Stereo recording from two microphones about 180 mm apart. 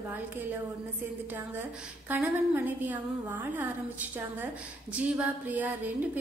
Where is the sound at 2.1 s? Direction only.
10° right (ahead or behind).